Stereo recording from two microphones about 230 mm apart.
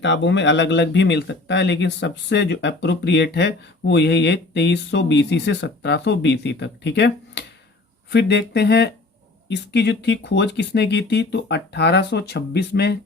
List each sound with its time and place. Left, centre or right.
0.0 s speech: left